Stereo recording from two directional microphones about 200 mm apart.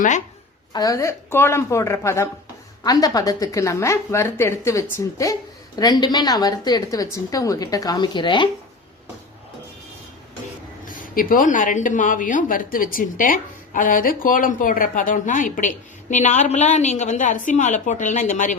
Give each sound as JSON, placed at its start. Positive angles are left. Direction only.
{"t": 0.7, "sound": "a woman's voice", "side_deg": 20}
{"t": 10.8, "sound": "speech", "side_deg": 45}